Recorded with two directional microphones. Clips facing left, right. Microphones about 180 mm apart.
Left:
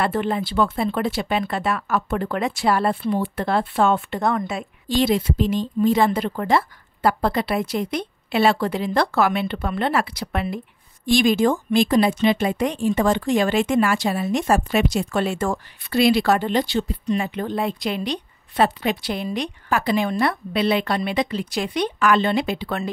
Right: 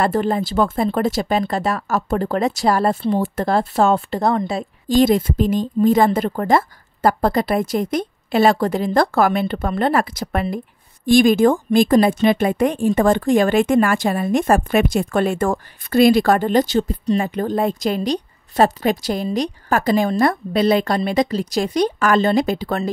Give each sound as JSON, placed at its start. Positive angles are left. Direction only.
{"t": 0.0, "sound": "speech", "side_deg": -40}